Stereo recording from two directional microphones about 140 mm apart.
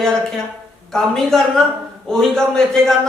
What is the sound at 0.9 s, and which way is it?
A man's voice, 5° left (ahead or behind).